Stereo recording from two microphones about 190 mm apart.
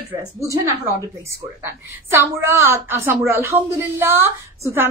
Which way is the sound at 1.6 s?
15° right (ahead or behind).